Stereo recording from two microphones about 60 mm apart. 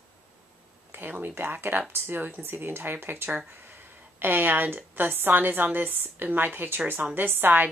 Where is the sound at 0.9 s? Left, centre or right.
Right.